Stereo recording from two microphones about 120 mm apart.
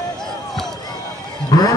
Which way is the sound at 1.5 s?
35° left (ahead or behind).